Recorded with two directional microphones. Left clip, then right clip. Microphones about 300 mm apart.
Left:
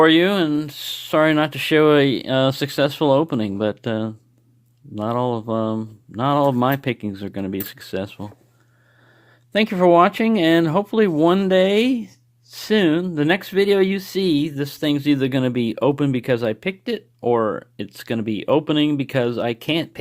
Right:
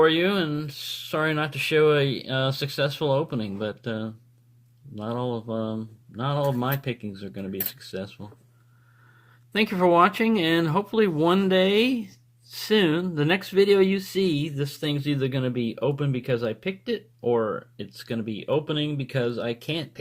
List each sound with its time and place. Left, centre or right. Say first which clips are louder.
0.0 s speech: left 6 dB; left
9.5 s speech: left 6 dB; left